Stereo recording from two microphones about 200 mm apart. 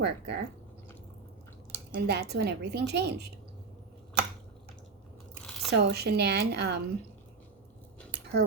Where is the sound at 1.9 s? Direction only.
55° right (ahead or behind).